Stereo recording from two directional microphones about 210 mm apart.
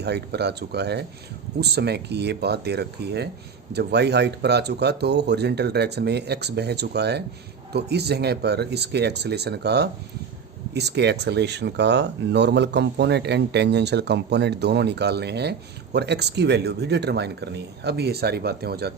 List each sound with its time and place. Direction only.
0.0 s speech: 50° right (ahead or behind)